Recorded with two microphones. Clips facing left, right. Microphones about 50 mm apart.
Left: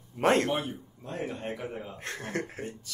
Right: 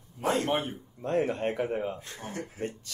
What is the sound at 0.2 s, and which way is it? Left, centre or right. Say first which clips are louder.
Speech: left 4 dB; left.